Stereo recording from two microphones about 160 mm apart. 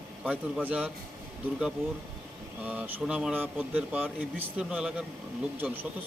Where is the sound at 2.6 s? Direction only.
10° right (ahead or behind).